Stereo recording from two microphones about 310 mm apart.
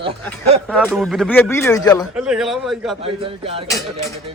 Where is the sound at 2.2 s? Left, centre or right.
Centre.